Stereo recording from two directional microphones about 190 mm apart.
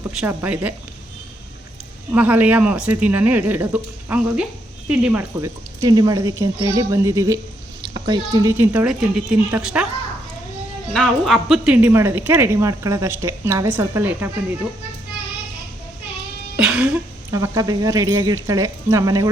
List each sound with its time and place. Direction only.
0.2 s speech: 5° right (ahead or behind)
2.1 s speech: 10° right (ahead or behind)
5.4 s speech: 20° right (ahead or behind)
10.9 s speech: centre (ahead or behind)
16.6 s throat clearing: 5° right (ahead or behind)
17.3 s speech: 15° right (ahead or behind)